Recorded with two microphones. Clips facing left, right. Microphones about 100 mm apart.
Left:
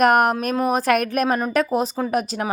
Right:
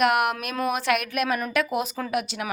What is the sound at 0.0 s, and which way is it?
A woman's voice, 40° left (ahead or behind).